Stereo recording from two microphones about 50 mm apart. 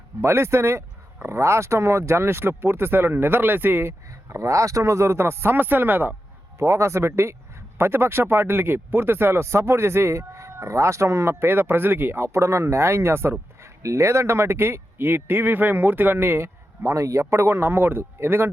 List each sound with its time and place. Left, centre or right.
0.2 s speech: right
4.1 s speech: right
6.6 s speech: right
13.6 s a man's voice: right
16.8 s speech: right